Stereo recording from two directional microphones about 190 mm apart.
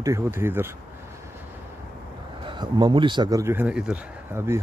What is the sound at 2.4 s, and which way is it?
Speech, 25° right (ahead or behind).